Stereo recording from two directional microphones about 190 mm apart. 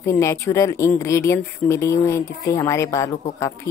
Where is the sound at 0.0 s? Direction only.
15° left (ahead or behind).